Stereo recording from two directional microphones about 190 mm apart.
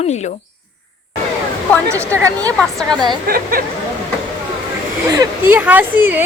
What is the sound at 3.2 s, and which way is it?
Speech, 50° right (ahead or behind).